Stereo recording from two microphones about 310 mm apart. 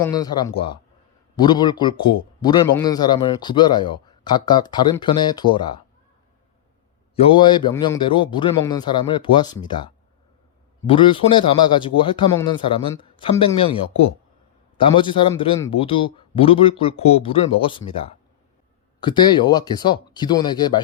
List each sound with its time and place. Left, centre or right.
0.0 s a man's voice: centre
7.2 s a man's voice: centre
18.9 s a man's voice: centre